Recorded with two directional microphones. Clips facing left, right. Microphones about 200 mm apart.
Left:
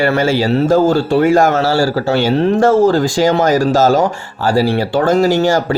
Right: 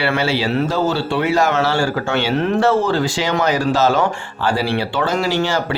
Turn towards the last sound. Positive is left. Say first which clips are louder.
# left 7 dB
turn(degrees=45)  # may be behind; listen again after turning